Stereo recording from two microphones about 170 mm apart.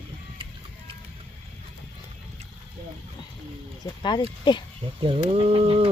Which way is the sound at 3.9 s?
25° left (ahead or behind).